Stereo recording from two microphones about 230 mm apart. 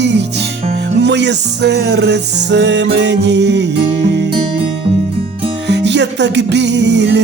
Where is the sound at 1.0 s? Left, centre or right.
Right.